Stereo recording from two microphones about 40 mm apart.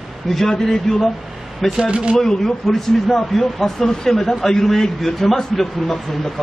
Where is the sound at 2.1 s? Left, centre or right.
Centre.